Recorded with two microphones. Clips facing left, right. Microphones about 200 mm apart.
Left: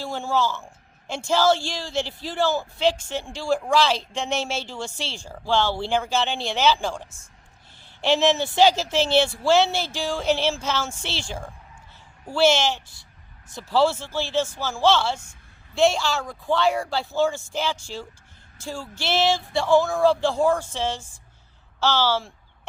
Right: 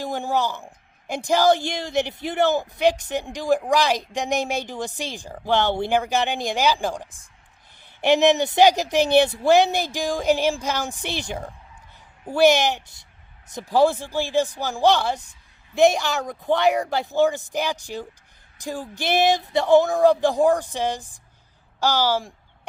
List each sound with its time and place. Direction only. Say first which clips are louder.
0.0 s speech: right 1 dB; 15° right (ahead or behind)
12.2 s speech: right 3 dB; 15° right (ahead or behind)